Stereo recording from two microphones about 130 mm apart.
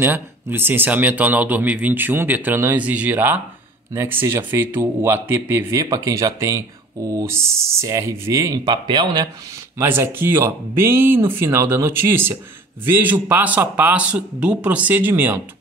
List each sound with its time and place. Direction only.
0.0 s speech: 15° right (ahead or behind); by 9.3 s 30° right (ahead or behind)
9.8 s speech: 15° right (ahead or behind)